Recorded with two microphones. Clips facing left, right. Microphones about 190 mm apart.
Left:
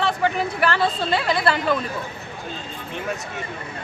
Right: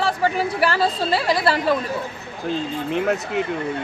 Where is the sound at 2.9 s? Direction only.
70° right (ahead or behind).